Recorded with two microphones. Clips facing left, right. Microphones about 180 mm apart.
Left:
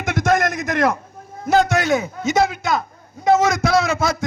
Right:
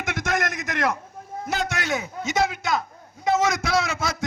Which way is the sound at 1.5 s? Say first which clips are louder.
Left 11 dB; 45° left (ahead or behind).